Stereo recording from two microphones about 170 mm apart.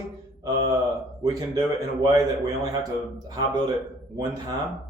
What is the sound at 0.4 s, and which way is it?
Speech, 20° right (ahead or behind).